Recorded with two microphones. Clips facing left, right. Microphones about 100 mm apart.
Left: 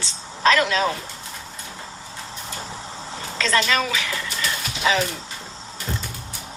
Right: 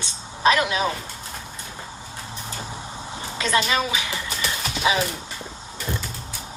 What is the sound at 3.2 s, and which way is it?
A woman's voice, 20° right (ahead or behind).